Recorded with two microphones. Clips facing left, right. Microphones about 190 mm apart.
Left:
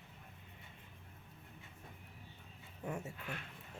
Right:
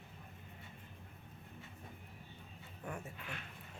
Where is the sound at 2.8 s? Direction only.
25° left (ahead or behind).